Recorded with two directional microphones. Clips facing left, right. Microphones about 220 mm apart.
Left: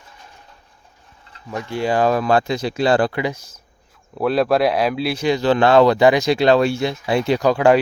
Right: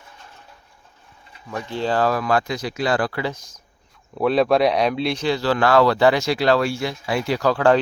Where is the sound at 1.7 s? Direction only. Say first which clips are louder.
Left 3 dB; 10° left (ahead or behind).